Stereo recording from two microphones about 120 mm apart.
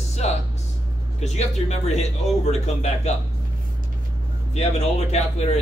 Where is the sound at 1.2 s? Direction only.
70° left (ahead or behind).